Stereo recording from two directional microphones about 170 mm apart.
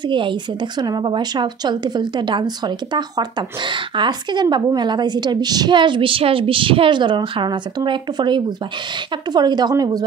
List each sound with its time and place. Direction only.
0.0 s a woman's voice: 30° right (ahead or behind)